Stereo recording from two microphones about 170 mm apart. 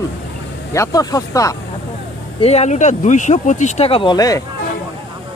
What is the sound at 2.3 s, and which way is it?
Speech, 40° left (ahead or behind).